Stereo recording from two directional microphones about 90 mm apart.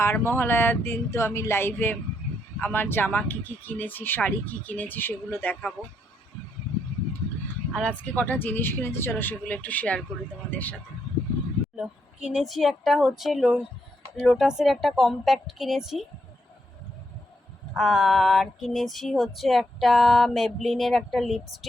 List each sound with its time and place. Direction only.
0.0 s speech: 30° left (ahead or behind)
5.8 s female singing: 5° right (ahead or behind)
7.7 s speech: 10° left (ahead or behind)
11.8 s female singing: 10° right (ahead or behind)
17.7 s female singing: 5° right (ahead or behind)